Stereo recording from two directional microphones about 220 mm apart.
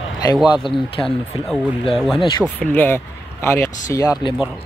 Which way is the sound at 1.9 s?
Centre (ahead or behind).